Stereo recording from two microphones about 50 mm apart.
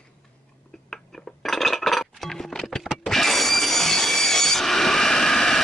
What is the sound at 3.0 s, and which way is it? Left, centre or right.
Wood, centre.